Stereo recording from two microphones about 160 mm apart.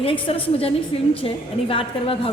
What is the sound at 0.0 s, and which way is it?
A woman's voice, 35° left (ahead or behind).